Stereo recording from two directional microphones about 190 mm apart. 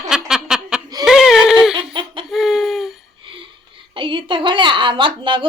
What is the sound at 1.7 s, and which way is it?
Laughter, 25° right (ahead or behind).